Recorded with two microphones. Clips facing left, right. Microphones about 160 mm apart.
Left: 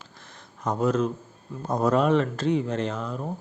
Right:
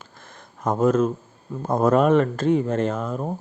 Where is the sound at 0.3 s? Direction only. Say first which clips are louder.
Right 4 dB; 50° right (ahead or behind).